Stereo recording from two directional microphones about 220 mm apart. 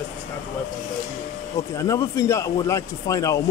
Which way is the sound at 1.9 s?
15° left (ahead or behind).